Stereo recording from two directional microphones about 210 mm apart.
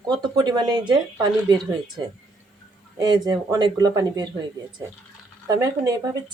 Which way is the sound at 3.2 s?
15° right (ahead or behind).